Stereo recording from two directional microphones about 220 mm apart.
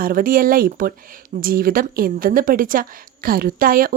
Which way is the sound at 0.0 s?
40° right (ahead or behind).